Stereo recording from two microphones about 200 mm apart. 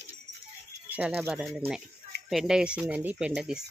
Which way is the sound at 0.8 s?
5° right (ahead or behind).